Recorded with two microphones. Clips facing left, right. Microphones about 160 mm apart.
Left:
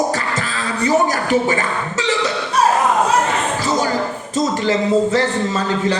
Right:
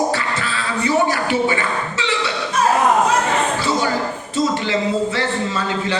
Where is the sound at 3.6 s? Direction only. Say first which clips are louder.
Left 1 dB; 40° left (ahead or behind).